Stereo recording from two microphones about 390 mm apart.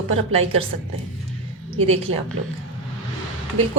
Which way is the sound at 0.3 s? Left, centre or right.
Right.